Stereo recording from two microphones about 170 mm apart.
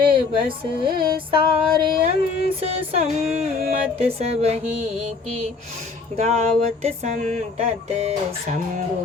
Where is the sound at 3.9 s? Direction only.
35° right (ahead or behind).